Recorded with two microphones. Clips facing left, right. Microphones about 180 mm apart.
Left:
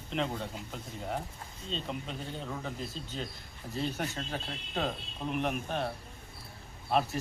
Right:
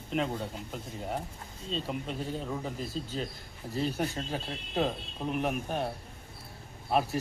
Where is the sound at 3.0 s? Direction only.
40° right (ahead or behind).